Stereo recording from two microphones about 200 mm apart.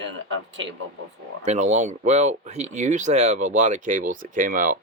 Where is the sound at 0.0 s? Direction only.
70° right (ahead or behind).